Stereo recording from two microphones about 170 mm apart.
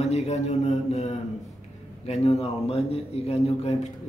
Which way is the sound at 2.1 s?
35° left (ahead or behind).